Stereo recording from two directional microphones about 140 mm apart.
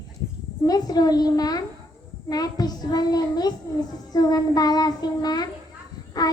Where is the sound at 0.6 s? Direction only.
30° left (ahead or behind).